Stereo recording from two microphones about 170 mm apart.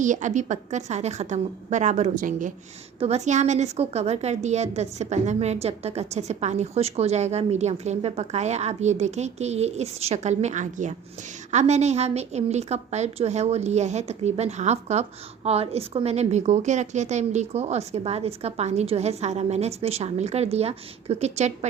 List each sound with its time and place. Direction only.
0.0 s a woman's voice: 45° right (ahead or behind)